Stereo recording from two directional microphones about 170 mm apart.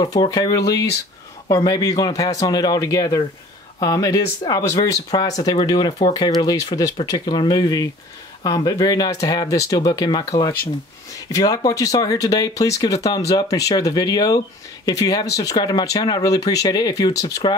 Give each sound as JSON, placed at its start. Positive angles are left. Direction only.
{"t": 0.0, "sound": "speech", "side_deg": 25}